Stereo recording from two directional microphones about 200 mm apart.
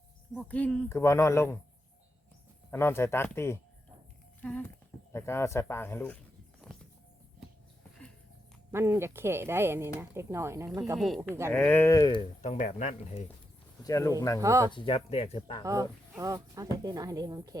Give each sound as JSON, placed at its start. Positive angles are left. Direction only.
{"t": 0.3, "sound": "speech", "side_deg": 5}
{"t": 2.6, "sound": "speech", "side_deg": 10}
{"t": 4.4, "sound": "a sound", "side_deg": 5}
{"t": 5.1, "sound": "speech", "side_deg": 15}
{"t": 6.6, "sound": "music", "side_deg": 0}
{"t": 8.7, "sound": "speech", "side_deg": -10}
{"t": 10.9, "sound": "speech", "side_deg": 0}
{"t": 11.2, "sound": "speech", "side_deg": -10}
{"t": 11.5, "sound": "speech", "side_deg": 5}
{"t": 12.4, "sound": "speech", "side_deg": 35}
{"t": 13.8, "sound": "speech", "side_deg": 15}
{"t": 14.4, "sound": "speech", "side_deg": -15}
{"t": 14.7, "sound": "speech", "side_deg": 25}
{"t": 15.6, "sound": "speech", "side_deg": -15}